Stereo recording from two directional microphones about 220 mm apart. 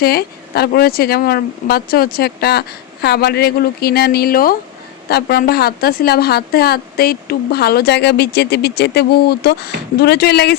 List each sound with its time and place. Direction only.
0.0 s a woman's voice: 45° left (ahead or behind)